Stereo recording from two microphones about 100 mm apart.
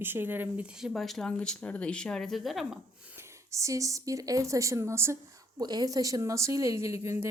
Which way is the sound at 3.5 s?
30° right (ahead or behind).